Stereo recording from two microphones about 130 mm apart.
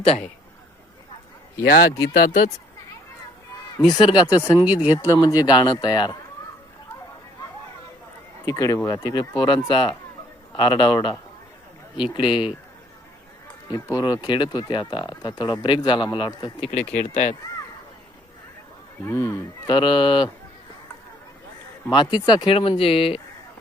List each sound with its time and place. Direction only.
1.5 s a man's voice: 25° left (ahead or behind)
2.1 s speech: 90° left
3.8 s speech: 35° left (ahead or behind)
4.6 s speech: 10° right (ahead or behind)
4.9 s speech: 30° left (ahead or behind)
8.4 s speech: 25° left (ahead or behind); by 12.5 s 40° left (ahead or behind)
13.7 s speech: 25° left (ahead or behind)
16.6 s speech: 55° left (ahead or behind)
19.0 s speech: 15° left (ahead or behind)
19.6 s speech: 35° left (ahead or behind)
22.0 s speech: 30° left (ahead or behind)
22.5 s speech: 45° left (ahead or behind)